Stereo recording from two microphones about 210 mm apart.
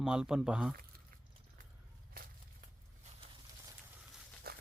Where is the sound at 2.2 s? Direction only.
45° right (ahead or behind).